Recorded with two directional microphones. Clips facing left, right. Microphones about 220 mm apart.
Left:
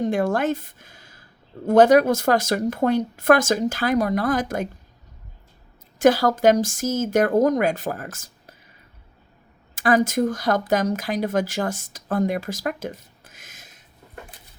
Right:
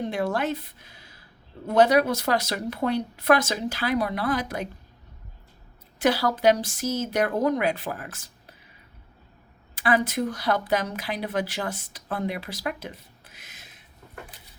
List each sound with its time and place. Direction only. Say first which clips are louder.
0.0 s speech: left 5 dB; 50° left (ahead or behind)
6.0 s speech: left 6 dB; 45° left (ahead or behind)
9.7 s speech: left 5 dB; 45° left (ahead or behind)